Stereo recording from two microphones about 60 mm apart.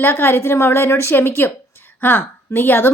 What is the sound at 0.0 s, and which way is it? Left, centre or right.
A woman's voice, left.